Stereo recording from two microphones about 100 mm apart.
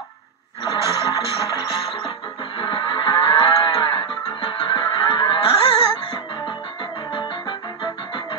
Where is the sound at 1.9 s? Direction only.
65° left (ahead or behind).